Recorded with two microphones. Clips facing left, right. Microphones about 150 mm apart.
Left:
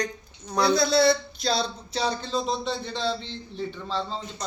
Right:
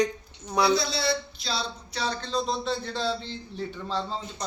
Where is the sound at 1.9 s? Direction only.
20° left (ahead or behind).